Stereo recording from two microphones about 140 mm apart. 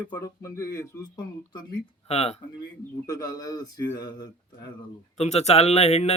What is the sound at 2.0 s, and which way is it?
Speech, 50° left (ahead or behind).